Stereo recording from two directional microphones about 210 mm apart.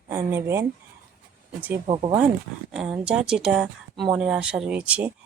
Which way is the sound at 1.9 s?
20° right (ahead or behind).